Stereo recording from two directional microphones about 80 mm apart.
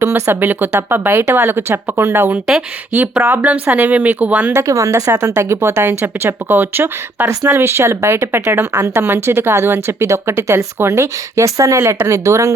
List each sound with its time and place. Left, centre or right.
0.0 s speech: right
2.3 s speech: centre
3.2 s speech: right
4.5 s speech: right